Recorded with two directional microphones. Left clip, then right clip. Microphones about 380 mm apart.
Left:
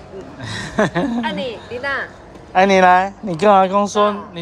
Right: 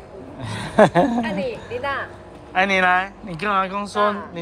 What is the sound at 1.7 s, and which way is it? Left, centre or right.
Speech, left.